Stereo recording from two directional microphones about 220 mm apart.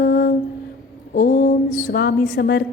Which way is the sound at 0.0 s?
45° left (ahead or behind).